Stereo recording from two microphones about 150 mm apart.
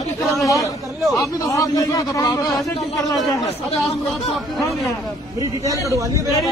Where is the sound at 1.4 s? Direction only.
20° left (ahead or behind).